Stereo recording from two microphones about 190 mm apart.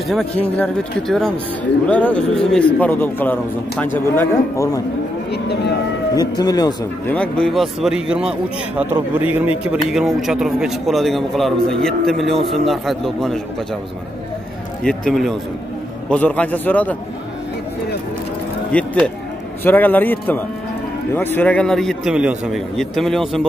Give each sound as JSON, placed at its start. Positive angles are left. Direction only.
{"t": 0.1, "sound": "a man's voice", "side_deg": 5}
{"t": 5.3, "sound": "speech", "side_deg": 60}
{"t": 6.1, "sound": "speech", "side_deg": 20}
{"t": 7.1, "sound": "a man's voice", "side_deg": 5}
{"t": 14.8, "sound": "a man's voice", "side_deg": 5}
{"t": 18.7, "sound": "a man's voice", "side_deg": 5}